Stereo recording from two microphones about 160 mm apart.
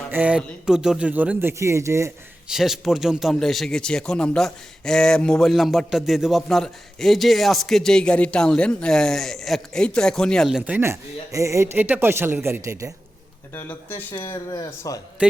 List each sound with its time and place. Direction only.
0.1 s speech: 10° right (ahead or behind)
2.5 s a man's voice: centre (ahead or behind)
10.7 s speech: 15° right (ahead or behind)
13.5 s speech: 10° left (ahead or behind)